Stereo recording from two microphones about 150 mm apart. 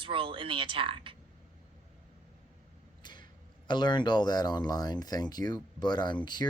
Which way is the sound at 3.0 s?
30° left (ahead or behind).